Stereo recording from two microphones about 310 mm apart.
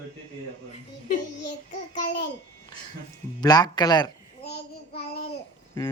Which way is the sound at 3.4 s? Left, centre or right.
Centre.